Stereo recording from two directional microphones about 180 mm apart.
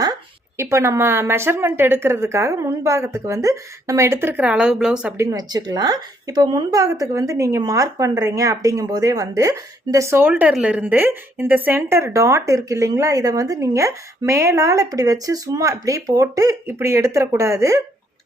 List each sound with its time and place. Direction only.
0.5 s speech: 15° right (ahead or behind)
5.1 s speech: 15° right (ahead or behind)